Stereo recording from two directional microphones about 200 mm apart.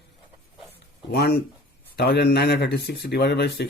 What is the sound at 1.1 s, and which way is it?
Speech, 55° left (ahead or behind).